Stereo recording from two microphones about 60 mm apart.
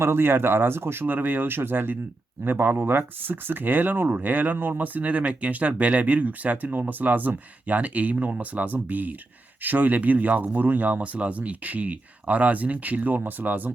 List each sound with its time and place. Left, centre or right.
0.0 s speech: right